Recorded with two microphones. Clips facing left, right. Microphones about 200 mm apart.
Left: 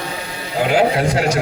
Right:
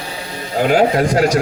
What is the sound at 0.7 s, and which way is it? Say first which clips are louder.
Speech: right 2 dB; 45° right (ahead or behind).